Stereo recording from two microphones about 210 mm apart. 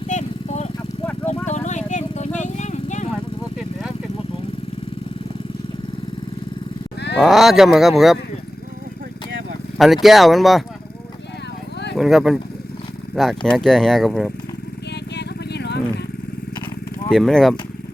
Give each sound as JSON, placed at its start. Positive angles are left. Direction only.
{"t": 0.1, "sound": "vehicle", "side_deg": 35}
{"t": 7.2, "sound": "speech", "side_deg": 0}
{"t": 9.7, "sound": "speech", "side_deg": 0}
{"t": 11.9, "sound": "speech", "side_deg": 0}
{"t": 15.1, "sound": "vehicle", "side_deg": 55}
{"t": 17.1, "sound": "speech", "side_deg": 0}